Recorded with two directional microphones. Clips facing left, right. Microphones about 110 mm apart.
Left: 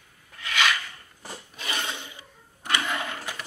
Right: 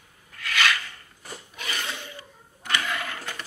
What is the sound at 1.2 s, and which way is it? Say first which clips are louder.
Filing: even; 30° left (ahead or behind).